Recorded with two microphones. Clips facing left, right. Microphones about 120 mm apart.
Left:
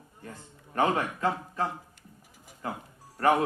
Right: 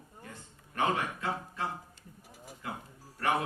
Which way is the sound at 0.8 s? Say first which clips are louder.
Left 4 dB; 40° left (ahead or behind).